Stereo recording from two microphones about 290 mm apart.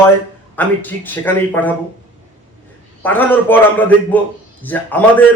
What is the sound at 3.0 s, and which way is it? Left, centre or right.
A man's voice, centre.